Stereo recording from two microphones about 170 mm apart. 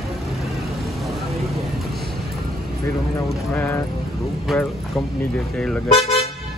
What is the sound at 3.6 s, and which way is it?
Speech, 10° left (ahead or behind).